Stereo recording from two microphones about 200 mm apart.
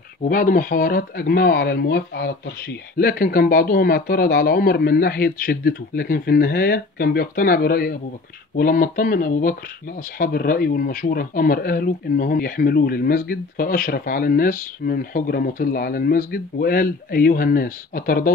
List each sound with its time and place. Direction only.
0.2 s speech: 45° left (ahead or behind)